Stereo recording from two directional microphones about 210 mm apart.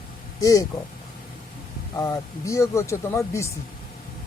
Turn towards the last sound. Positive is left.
turn(degrees=15)  # may be behind; listen again after turning